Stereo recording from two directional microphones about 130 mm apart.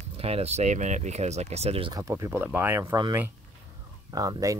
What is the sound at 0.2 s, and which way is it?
Speech, 50° right (ahead or behind).